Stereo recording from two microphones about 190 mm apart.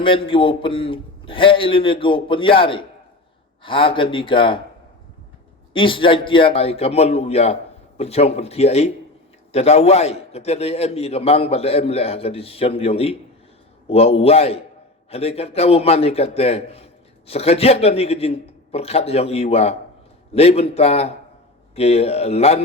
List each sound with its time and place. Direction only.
0.0 s a man's voice: 25° left (ahead or behind)
5.7 s a man's voice: 25° left (ahead or behind)